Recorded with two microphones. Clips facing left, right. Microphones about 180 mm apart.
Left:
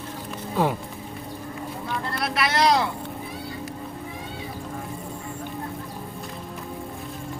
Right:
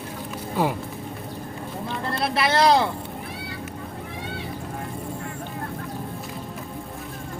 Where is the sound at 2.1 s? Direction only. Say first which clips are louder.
Right 3 dB; 25° right (ahead or behind).